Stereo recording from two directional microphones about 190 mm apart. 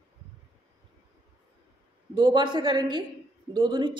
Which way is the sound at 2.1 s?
25° right (ahead or behind).